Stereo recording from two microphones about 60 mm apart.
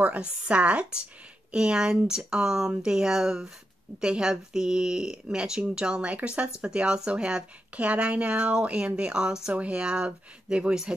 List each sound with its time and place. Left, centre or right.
0.0 s speech: right